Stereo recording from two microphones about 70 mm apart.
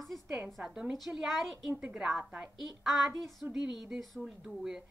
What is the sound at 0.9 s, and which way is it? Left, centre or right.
A woman's voice, centre.